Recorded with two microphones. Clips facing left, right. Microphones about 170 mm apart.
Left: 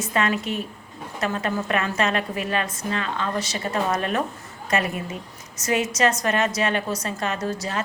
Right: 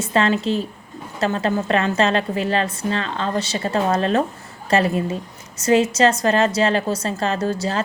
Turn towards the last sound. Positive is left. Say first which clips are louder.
# right 5 dB
turn(degrees=-30)  # may be behind; listen again after turning